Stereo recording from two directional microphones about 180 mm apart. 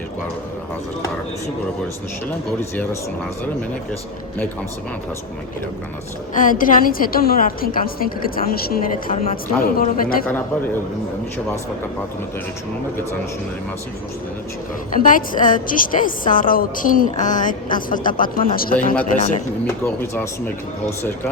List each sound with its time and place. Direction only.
2.6 s speech: 15° left (ahead or behind)
6.3 s a woman's voice: 50° left (ahead or behind)
14.9 s a woman's voice: 45° left (ahead or behind)
19.6 s speech: 15° left (ahead or behind)